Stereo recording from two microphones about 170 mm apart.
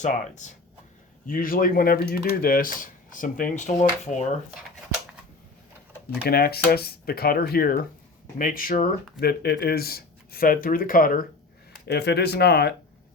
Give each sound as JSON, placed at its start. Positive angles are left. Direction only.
{"t": 0.0, "sound": "speech", "side_deg": 45}
{"t": 6.2, "sound": "speech", "side_deg": 65}
{"t": 8.4, "sound": "speech", "side_deg": 55}
{"t": 9.2, "sound": "speech", "side_deg": 70}
{"t": 11.9, "sound": "speech", "side_deg": 75}